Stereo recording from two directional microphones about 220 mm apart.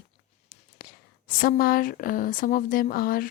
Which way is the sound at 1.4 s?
40° left (ahead or behind).